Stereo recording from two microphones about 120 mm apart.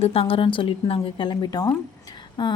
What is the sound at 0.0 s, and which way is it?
A woman's voice, 55° left (ahead or behind).